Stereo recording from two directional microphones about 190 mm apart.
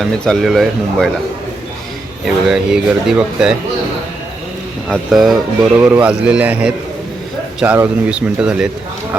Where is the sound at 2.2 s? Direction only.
5° right (ahead or behind).